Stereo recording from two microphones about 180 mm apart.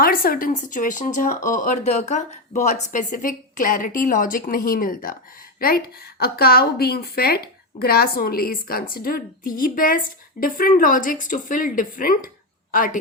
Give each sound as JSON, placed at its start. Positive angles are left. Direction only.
{"t": 0.0, "sound": "a woman's voice", "side_deg": 55}